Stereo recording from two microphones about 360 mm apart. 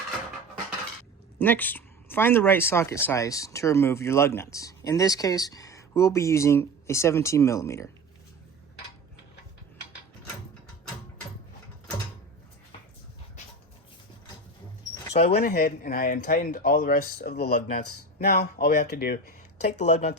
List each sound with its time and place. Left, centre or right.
1.4 s speech: centre
15.1 s speech: left